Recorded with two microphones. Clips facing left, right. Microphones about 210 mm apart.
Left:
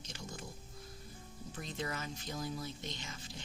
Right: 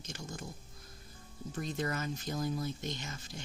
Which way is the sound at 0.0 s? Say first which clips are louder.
Right 3 dB; 45° right (ahead or behind).